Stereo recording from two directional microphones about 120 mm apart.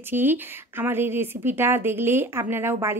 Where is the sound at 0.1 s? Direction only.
15° right (ahead or behind).